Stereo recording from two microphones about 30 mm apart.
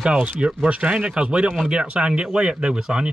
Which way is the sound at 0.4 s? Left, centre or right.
Right.